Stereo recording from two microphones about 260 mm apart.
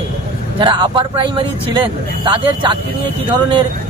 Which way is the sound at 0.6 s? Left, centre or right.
Centre.